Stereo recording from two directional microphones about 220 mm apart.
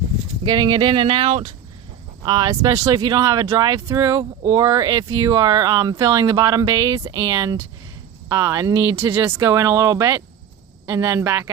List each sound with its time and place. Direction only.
0.4 s speech: 20° right (ahead or behind)